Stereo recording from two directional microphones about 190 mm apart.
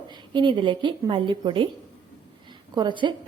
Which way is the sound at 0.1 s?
25° right (ahead or behind).